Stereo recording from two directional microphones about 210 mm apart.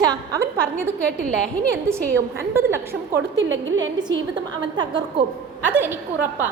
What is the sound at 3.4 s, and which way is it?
Speech, 65° right (ahead or behind).